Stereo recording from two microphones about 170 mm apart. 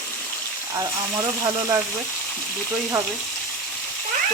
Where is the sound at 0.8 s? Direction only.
20° right (ahead or behind).